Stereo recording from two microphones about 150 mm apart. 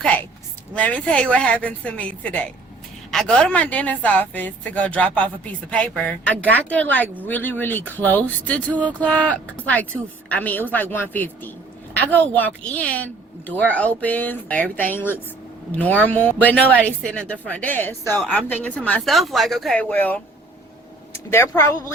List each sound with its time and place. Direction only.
0.0 s a sound: 10° left (ahead or behind)
0.7 s speech: 10° left (ahead or behind)
21.3 s speech: 20° left (ahead or behind)